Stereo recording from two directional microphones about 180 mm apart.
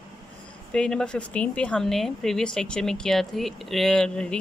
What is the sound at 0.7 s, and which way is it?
Speech, 5° left (ahead or behind).